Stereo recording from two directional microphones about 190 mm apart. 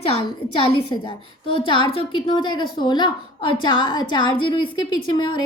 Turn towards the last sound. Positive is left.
turn(degrees=25)  # may be behind; listen again after turning